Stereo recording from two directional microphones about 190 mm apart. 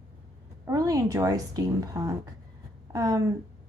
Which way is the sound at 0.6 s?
20° right (ahead or behind).